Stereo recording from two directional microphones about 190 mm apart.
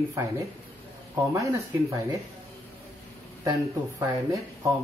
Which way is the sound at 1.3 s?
15° right (ahead or behind).